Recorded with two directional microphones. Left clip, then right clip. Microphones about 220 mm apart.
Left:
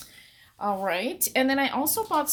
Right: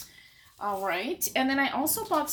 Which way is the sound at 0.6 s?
50° left (ahead or behind).